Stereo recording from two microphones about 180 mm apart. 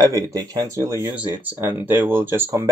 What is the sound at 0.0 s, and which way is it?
Speech, 20° right (ahead or behind).